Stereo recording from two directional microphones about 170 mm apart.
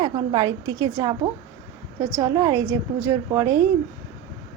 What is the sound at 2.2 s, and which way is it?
A woman's voice, 15° right (ahead or behind).